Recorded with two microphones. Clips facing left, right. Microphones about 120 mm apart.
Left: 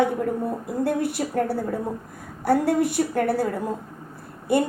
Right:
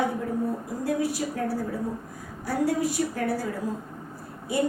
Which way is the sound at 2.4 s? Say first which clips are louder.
Left 5 dB; 60° left (ahead or behind).